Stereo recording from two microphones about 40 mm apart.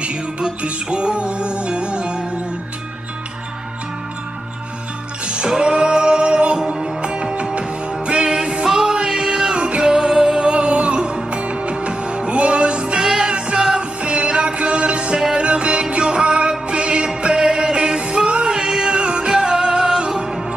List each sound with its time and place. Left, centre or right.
0.0 s music: right
5.2 s music: right
8.3 s music: centre
13.0 s music: centre